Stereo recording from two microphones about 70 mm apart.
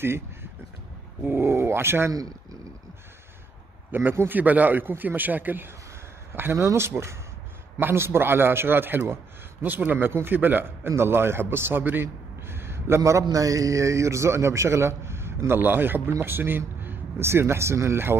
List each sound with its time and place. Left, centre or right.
0.0 s a sound: right
1.2 s a man's voice: right
3.9 s a man's voice: right
6.3 s a man's voice: right
13.3 s a man's voice: right